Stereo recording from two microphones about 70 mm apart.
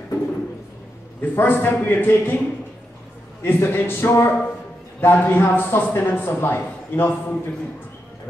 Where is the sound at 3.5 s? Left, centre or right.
Left.